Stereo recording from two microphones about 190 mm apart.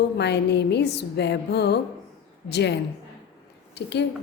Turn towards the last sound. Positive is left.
turn(degrees=65)  # may be behind; listen again after turning